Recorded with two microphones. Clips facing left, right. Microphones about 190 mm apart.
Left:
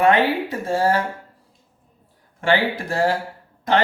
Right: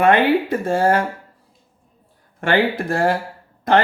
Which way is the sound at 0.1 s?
55° right (ahead or behind).